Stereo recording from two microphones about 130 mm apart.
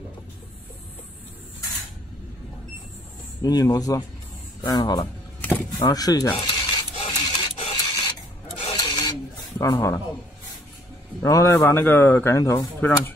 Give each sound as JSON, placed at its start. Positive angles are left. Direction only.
{"t": 3.4, "sound": "speech", "side_deg": 30}
{"t": 5.4, "sound": "vehicle", "side_deg": 15}
{"t": 5.9, "sound": "speech", "side_deg": 30}
{"t": 6.4, "sound": "a sound", "side_deg": 35}
{"t": 7.1, "sound": "printer", "side_deg": 30}
{"t": 8.7, "sound": "filing", "side_deg": 35}
{"t": 9.6, "sound": "speech", "side_deg": 20}
{"t": 11.2, "sound": "speech", "side_deg": 25}